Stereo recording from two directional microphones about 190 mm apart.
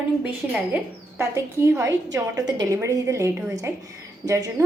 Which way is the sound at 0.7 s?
15° right (ahead or behind).